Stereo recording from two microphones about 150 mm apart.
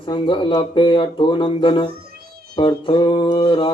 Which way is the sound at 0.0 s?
30° left (ahead or behind).